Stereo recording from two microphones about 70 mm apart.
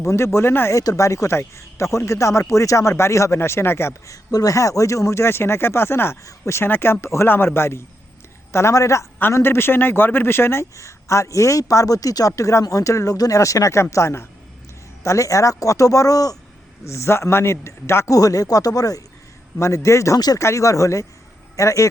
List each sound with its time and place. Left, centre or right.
0.0 s speech: left
0.8 s speech: left
9.3 s speech: left
16.8 s speech: left
18.1 s speech: left
19.5 s speech: left
20.1 s speech: left
20.4 s a man's voice: left